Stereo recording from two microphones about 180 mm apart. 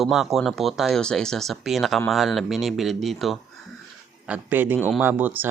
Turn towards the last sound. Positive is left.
turn(degrees=-10)  # may be behind; listen again after turning